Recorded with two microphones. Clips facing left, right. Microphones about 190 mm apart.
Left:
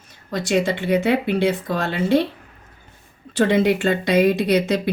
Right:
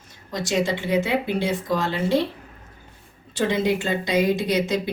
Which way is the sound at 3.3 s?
65° left (ahead or behind).